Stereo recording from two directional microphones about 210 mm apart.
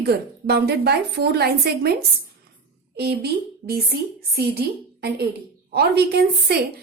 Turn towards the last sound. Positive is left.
turn(degrees=-50)  # may be behind; listen again after turning